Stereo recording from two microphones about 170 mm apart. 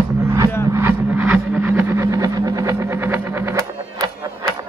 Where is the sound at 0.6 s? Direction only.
15° right (ahead or behind).